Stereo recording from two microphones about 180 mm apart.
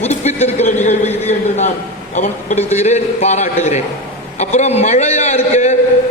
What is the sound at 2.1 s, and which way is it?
A man's voice, 40° left (ahead or behind).